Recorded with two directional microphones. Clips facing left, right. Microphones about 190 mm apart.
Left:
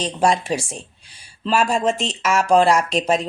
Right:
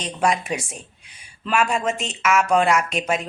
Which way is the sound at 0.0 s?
30° left (ahead or behind).